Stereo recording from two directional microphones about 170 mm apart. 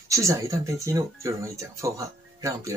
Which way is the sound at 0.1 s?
20° right (ahead or behind).